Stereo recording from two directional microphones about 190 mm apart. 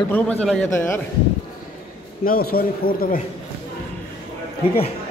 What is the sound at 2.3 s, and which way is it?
Speech, 50° left (ahead or behind).